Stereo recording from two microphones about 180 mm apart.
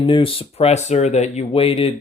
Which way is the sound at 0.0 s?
30° left (ahead or behind).